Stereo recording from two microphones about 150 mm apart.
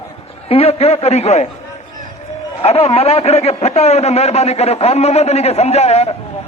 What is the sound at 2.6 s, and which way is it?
A man's voice, 45° left (ahead or behind).